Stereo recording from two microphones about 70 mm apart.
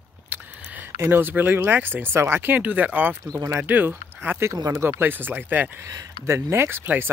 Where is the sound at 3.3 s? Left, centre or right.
Right.